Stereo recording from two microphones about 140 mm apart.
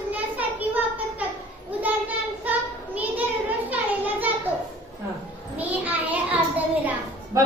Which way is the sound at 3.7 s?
10° right (ahead or behind).